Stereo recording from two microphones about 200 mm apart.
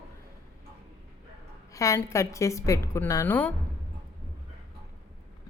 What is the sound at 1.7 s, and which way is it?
A woman's voice, 15° left (ahead or behind).